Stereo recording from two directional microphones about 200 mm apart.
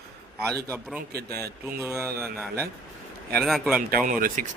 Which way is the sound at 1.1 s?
50° right (ahead or behind).